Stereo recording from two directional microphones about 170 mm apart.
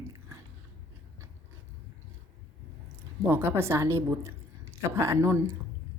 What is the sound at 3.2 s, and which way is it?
A woman's voice, 15° right (ahead or behind).